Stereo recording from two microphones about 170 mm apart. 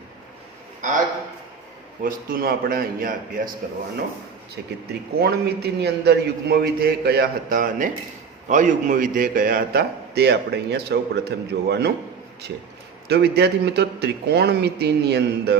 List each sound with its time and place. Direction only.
0.8 s a man's voice: 45° right (ahead or behind)
2.0 s a man's voice: 55° right (ahead or behind)
5.2 s a man's voice: 70° right (ahead or behind)
13.1 s a man's voice: 75° right (ahead or behind)